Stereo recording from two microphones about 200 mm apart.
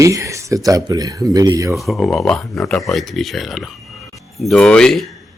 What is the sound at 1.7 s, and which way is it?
Speech, centre (ahead or behind).